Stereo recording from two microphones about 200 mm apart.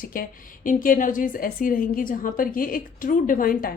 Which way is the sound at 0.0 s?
45° left (ahead or behind).